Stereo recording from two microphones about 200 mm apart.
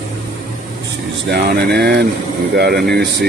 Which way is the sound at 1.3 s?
55° right (ahead or behind).